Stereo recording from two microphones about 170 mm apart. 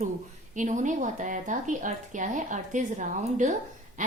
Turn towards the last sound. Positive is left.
turn(degrees=-45)  # may be behind; listen again after turning